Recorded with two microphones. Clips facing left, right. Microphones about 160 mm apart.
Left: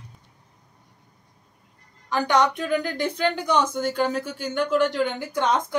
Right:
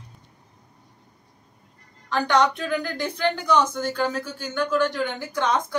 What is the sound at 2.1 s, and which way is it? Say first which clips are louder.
Speech: even; 15° left (ahead or behind).